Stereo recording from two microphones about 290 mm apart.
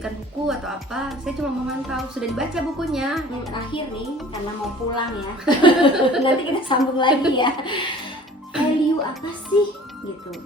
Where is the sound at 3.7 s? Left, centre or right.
Centre.